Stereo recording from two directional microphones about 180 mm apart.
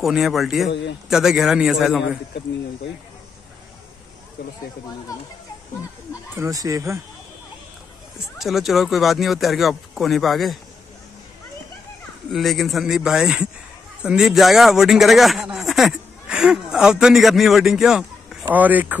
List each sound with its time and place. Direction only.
0.0 s speech: centre (ahead or behind)
0.7 s a man's voice: 75° left (ahead or behind)
1.0 s speech: 5° right (ahead or behind)
4.4 s speech: 60° left (ahead or behind)
6.3 s speech: 20° right (ahead or behind)
8.4 s speech: centre (ahead or behind)
12.3 s speech: centre (ahead or behind)